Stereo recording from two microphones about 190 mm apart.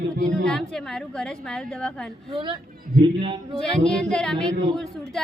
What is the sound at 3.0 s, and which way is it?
Speech, 25° right (ahead or behind).